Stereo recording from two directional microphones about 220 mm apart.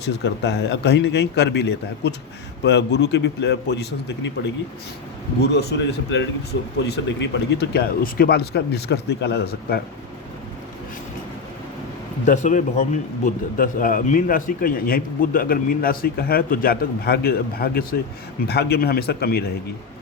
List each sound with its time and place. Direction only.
0.0 s speech: 50° left (ahead or behind)
12.2 s a man's voice: 35° left (ahead or behind)